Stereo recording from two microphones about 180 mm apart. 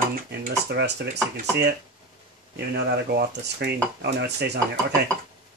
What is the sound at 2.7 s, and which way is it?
Speech, 60° right (ahead or behind).